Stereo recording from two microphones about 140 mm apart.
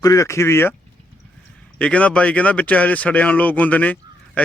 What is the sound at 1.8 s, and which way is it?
Speech, 10° left (ahead or behind).